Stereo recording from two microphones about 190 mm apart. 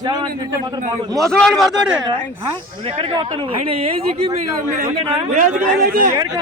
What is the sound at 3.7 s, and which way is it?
Speech, 30° right (ahead or behind).